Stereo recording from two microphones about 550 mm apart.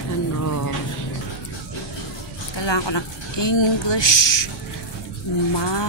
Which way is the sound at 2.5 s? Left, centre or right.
Left.